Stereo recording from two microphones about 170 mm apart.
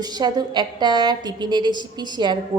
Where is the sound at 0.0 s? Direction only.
25° right (ahead or behind).